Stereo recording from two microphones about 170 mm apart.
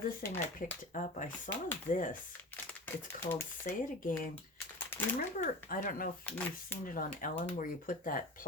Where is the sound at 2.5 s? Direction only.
10° left (ahead or behind).